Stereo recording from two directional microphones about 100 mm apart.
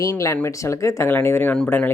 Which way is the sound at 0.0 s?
30° left (ahead or behind).